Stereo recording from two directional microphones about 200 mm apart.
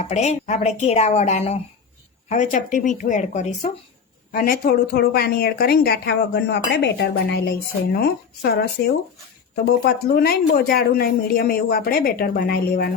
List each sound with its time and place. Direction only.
0.0 s a woman's voice: 35° left (ahead or behind); by 12.9 s 50° left (ahead or behind)